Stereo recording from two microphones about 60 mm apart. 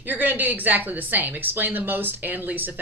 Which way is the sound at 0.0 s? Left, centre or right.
Right.